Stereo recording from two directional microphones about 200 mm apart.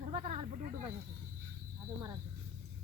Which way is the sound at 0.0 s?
35° right (ahead or behind).